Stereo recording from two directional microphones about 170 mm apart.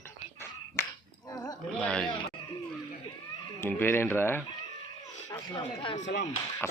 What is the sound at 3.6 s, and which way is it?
Speech, 10° left (ahead or behind).